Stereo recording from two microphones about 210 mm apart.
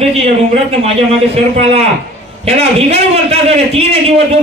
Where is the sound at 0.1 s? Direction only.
30° right (ahead or behind).